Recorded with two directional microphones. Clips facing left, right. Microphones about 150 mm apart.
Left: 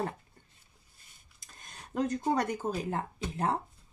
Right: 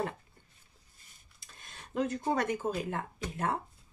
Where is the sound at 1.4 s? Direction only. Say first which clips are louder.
Left 1 dB; 40° left (ahead or behind).